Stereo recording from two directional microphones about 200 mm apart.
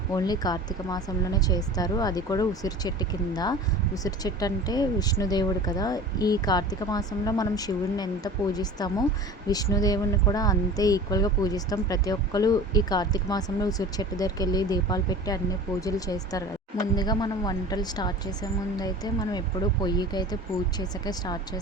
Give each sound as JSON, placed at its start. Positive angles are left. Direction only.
{"t": 0.1, "sound": "a woman's voice", "side_deg": 20}